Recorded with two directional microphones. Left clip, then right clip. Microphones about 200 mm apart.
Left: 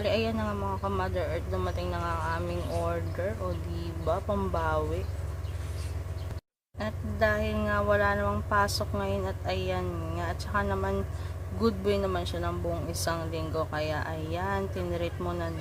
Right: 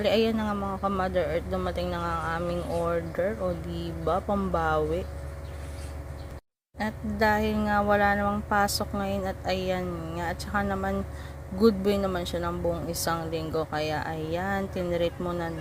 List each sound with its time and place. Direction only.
0.0 s speech: 15° right (ahead or behind)
6.7 s speech: 15° right (ahead or behind)